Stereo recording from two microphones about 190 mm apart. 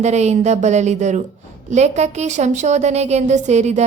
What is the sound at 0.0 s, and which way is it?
A woman's voice, 35° right (ahead or behind).